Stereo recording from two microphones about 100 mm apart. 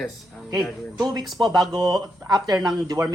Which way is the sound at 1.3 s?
45° right (ahead or behind).